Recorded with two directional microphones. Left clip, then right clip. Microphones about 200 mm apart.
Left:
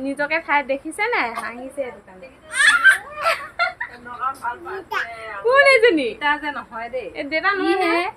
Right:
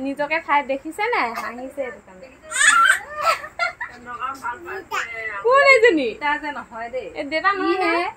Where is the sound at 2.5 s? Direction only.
5° left (ahead or behind).